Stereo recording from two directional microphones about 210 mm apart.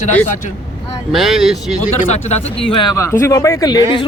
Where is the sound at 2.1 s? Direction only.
30° left (ahead or behind).